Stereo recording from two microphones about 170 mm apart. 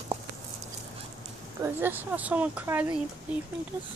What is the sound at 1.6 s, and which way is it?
Speech, 10° right (ahead or behind).